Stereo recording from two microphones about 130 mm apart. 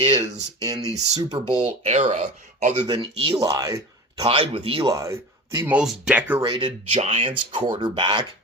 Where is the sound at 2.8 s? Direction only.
40° right (ahead or behind).